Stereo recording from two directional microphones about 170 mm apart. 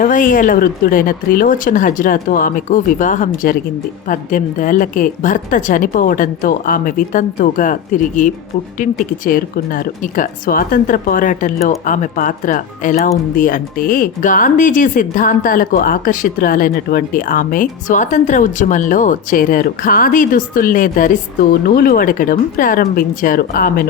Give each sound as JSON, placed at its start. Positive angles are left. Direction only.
{"t": 0.0, "sound": "speech", "side_deg": 50}